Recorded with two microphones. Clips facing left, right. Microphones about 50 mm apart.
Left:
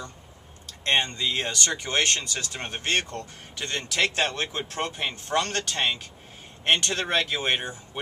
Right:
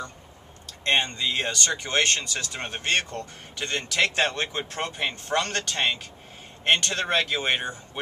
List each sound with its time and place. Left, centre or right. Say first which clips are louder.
0.8 s speech: even; centre